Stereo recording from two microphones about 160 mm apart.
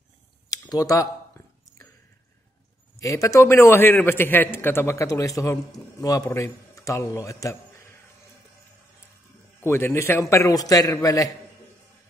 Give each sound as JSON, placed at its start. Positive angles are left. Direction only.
{"t": 0.5, "sound": "a sound", "side_deg": 20}
{"t": 3.0, "sound": "a man's voice", "side_deg": 20}
{"t": 9.6, "sound": "a man's voice", "side_deg": 15}